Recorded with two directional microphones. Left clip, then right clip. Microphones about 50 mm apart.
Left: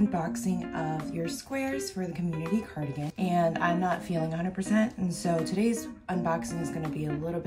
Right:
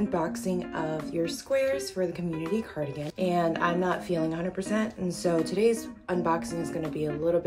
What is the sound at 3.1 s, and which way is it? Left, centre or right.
A woman's voice, right.